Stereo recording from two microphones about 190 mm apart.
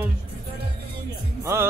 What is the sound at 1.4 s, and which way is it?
Speech, 15° right (ahead or behind).